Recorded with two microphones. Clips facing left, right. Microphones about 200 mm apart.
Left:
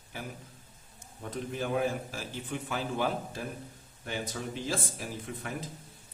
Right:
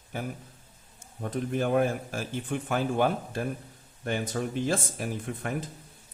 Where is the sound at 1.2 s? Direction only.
55° right (ahead or behind).